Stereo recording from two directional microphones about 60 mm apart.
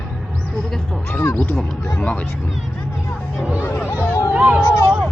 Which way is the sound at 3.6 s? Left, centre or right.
Left.